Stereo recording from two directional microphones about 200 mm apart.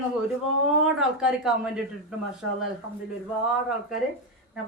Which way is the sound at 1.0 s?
5° right (ahead or behind).